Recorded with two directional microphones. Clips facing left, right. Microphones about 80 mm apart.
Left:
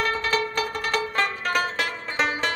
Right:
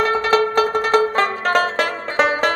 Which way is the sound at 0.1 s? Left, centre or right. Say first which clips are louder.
Right 9 dB; right.